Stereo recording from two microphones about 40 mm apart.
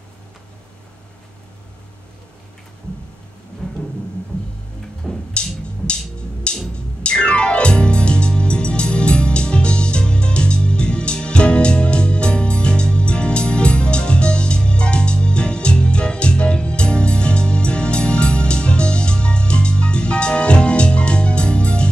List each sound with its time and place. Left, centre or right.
5.3 s music: left